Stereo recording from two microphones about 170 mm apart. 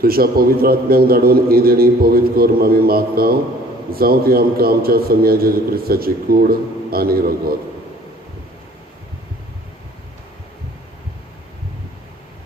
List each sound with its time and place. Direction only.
0.0 s a man's voice: 60° right (ahead or behind)